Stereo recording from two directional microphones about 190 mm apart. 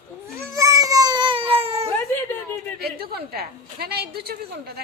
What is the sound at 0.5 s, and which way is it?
Baby cry, 15° right (ahead or behind).